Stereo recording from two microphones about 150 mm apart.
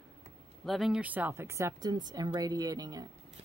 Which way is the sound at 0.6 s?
Centre (ahead or behind).